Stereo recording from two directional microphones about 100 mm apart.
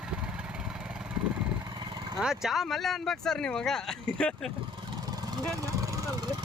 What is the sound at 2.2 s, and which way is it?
Speech, 5° right (ahead or behind).